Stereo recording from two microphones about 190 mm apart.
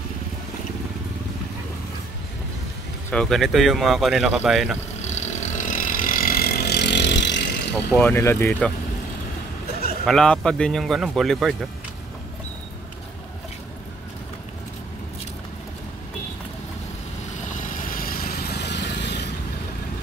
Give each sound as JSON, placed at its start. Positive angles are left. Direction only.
{"t": 3.1, "sound": "speech", "side_deg": 5}
{"t": 5.0, "sound": "vehicle", "side_deg": 35}
{"t": 8.0, "sound": "speech", "side_deg": 15}
{"t": 10.0, "sound": "speech", "side_deg": 5}
{"t": 17.5, "sound": "vehicle", "side_deg": 45}